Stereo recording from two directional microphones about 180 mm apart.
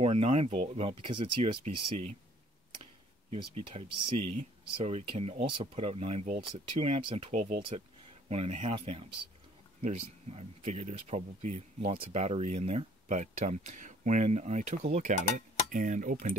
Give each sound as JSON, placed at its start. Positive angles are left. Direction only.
{"t": 0.0, "sound": "speech", "side_deg": -35}
{"t": 7.3, "sound": "speech", "side_deg": -50}
{"t": 8.3, "sound": "speech", "side_deg": -35}